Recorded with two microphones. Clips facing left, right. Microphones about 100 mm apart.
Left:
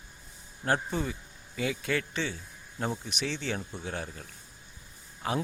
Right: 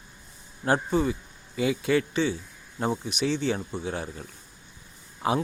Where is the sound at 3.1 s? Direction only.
5° right (ahead or behind).